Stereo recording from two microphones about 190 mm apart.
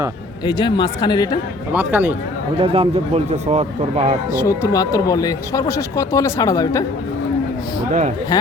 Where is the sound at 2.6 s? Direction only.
30° right (ahead or behind).